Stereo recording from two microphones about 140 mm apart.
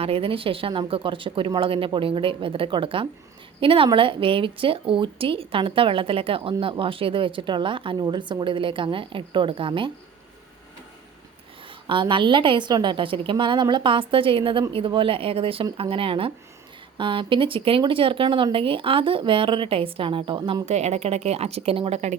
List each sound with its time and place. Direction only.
0.0 s a woman's voice: 40° right (ahead or behind)
11.9 s a woman's voice: 35° right (ahead or behind)
20.7 s speech: 50° right (ahead or behind)